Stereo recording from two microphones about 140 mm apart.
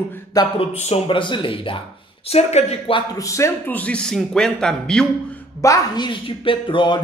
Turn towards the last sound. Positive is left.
turn(degrees=35)  # may be behind; listen again after turning